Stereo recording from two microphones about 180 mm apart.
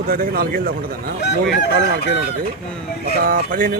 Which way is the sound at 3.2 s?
50° right (ahead or behind).